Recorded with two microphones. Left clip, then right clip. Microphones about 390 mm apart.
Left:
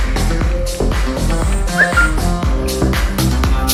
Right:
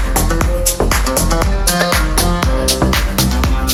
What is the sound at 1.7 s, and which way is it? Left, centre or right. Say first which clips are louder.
Music: left 4 dB; right.